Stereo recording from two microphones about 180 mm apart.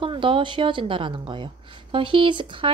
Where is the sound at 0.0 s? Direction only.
30° right (ahead or behind).